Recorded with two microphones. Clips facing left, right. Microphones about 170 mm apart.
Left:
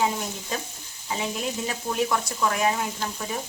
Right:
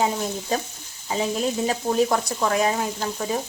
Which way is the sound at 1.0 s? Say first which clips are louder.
Right 5 dB; 35° right (ahead or behind).